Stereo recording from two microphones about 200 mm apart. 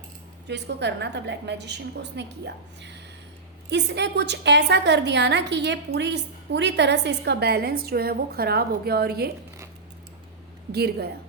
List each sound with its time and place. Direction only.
0.4 s a woman's voice: 60° right (ahead or behind)
10.7 s speech: 55° right (ahead or behind)